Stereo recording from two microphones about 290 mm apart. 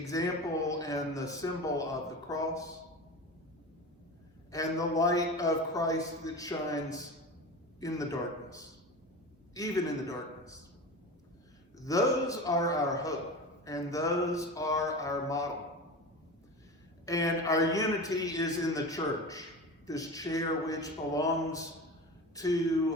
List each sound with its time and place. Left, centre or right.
0.0 s a man's voice: centre
4.5 s a man's voice: centre
9.6 s a man's voice: centre
11.9 s a man's voice: centre
17.1 s a man's voice: centre